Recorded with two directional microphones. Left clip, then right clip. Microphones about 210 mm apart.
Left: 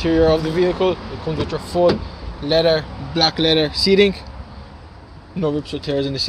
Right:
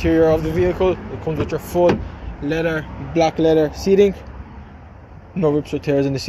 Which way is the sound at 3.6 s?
35° left (ahead or behind).